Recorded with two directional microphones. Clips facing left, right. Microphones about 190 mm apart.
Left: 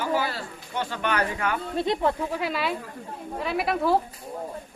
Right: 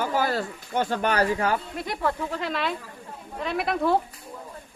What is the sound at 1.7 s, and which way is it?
Speech, 25° left (ahead or behind).